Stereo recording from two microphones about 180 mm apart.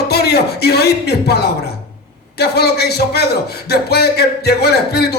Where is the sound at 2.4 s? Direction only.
65° left (ahead or behind).